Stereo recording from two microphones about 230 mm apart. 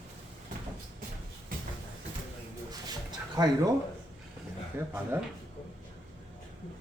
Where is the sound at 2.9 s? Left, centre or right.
Centre.